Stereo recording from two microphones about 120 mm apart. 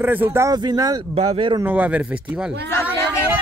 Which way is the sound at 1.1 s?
55° right (ahead or behind).